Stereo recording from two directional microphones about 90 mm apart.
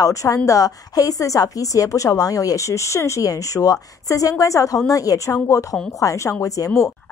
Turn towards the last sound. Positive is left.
turn(degrees=40)  # may be behind; listen again after turning